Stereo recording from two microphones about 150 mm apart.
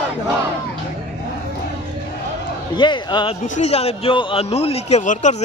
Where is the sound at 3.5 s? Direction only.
45° left (ahead or behind).